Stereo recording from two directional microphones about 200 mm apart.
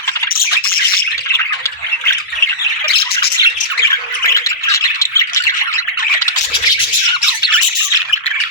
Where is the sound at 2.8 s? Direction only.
50° left (ahead or behind).